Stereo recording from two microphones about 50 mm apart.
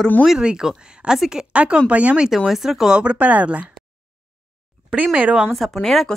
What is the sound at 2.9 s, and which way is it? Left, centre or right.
Speech, right.